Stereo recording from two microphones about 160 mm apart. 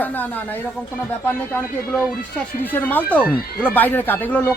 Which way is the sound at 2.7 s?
10° left (ahead or behind).